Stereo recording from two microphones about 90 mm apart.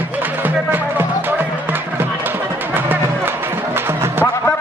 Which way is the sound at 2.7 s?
20° right (ahead or behind).